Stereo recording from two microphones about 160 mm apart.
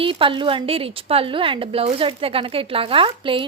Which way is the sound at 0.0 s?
35° right (ahead or behind).